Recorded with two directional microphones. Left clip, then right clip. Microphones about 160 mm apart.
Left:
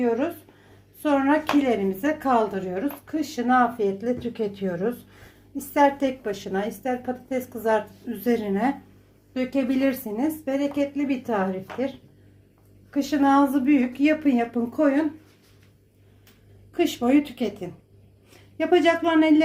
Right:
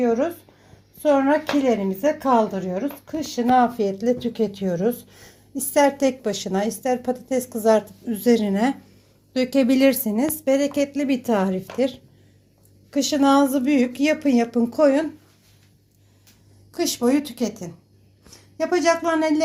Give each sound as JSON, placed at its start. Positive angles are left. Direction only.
{"t": 1.0, "sound": "a woman's voice", "side_deg": -45}
{"t": 17.0, "sound": "a woman's voice", "side_deg": -50}
{"t": 18.5, "sound": "a woman's voice", "side_deg": -45}